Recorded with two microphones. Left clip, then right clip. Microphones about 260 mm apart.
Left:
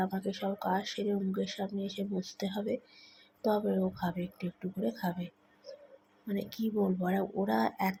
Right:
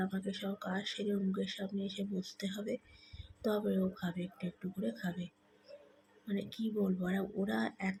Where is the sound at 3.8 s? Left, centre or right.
Centre.